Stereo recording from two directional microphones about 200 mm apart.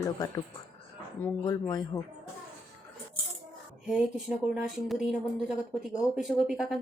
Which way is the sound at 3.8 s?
Centre (ahead or behind).